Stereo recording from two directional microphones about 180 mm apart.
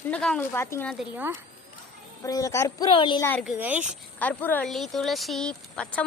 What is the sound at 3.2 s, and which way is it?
Speech, 10° left (ahead or behind).